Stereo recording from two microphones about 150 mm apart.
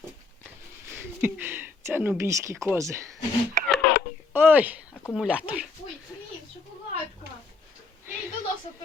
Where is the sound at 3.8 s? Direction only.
90° left.